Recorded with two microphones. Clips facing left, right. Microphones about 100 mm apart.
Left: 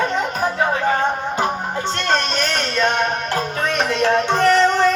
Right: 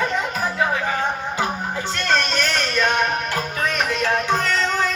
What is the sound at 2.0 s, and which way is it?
Music, 20° left (ahead or behind).